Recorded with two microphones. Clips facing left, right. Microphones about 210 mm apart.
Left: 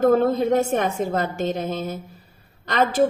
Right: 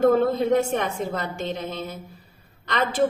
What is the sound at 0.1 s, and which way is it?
A woman's voice, 45° left (ahead or behind).